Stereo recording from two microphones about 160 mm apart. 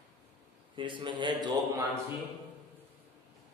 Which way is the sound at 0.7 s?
30° right (ahead or behind).